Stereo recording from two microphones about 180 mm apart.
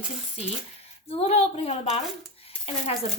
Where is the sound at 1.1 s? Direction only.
35° left (ahead or behind).